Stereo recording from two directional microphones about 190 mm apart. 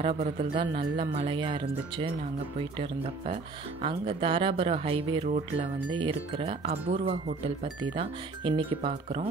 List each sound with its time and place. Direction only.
0.1 s speech: 30° right (ahead or behind)
3.8 s speech: 30° right (ahead or behind)